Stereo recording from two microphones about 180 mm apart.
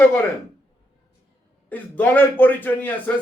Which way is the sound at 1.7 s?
10° left (ahead or behind).